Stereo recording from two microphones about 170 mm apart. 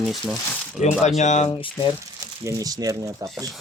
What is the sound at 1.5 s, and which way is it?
Speech, 30° left (ahead or behind).